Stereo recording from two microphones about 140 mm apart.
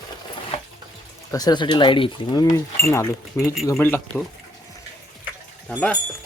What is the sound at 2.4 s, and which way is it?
Speech, 25° left (ahead or behind).